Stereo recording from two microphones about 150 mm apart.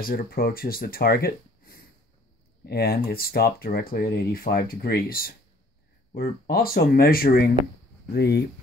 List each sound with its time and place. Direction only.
0.0 s speech: 75° left (ahead or behind)
2.6 s speech: 90° left
8.1 s speech: 90° left